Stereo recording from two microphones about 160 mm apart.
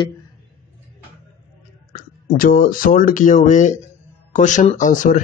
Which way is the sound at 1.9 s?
60° left (ahead or behind).